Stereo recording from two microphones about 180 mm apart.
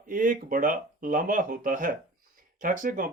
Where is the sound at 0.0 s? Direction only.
50° right (ahead or behind).